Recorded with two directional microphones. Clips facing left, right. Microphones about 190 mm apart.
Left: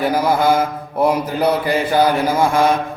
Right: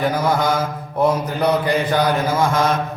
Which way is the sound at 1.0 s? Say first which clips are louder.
Left 1 dB; 10° left (ahead or behind).